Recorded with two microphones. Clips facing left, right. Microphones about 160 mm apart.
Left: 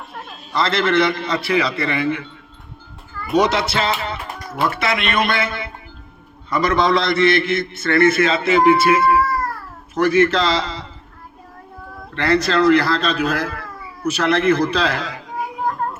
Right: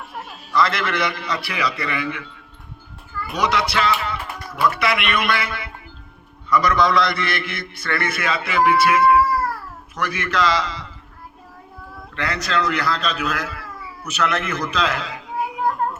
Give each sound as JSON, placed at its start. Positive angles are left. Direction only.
{"t": 0.5, "sound": "a man's voice", "side_deg": 25}
{"t": 3.3, "sound": "a man's voice", "side_deg": 25}
{"t": 12.1, "sound": "a man's voice", "side_deg": 30}